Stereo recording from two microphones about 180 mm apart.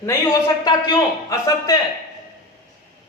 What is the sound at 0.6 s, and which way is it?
A man's voice, 20° left (ahead or behind).